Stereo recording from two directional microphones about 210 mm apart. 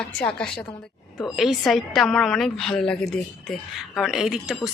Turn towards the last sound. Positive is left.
turn(degrees=0)  # may be behind; listen again after turning